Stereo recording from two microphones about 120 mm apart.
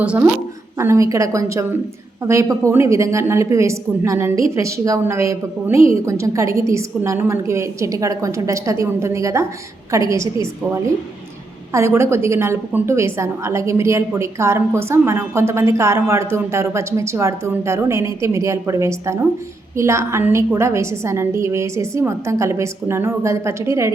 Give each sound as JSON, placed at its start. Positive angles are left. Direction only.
{"t": 0.0, "sound": "a woman's voice", "side_deg": -10}
{"t": 0.8, "sound": "a woman's voice", "side_deg": -25}
{"t": 11.7, "sound": "a woman's voice", "side_deg": -25}